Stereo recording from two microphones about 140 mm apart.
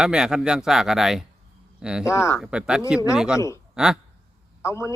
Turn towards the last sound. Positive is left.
turn(degrees=20)  # may be behind; listen again after turning